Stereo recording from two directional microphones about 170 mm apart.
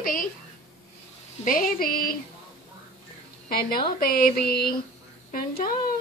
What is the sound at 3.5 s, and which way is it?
Speech, 60° left (ahead or behind).